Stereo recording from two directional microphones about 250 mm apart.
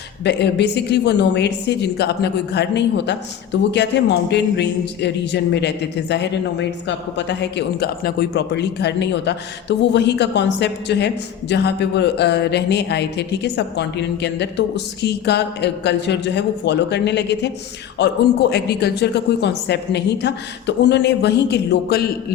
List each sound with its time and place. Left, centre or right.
0.3 s a woman's voice: left
18.5 s a woman's voice: left